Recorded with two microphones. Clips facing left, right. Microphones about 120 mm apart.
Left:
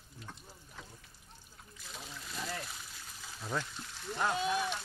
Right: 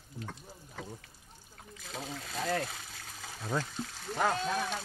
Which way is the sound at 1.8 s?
80° right.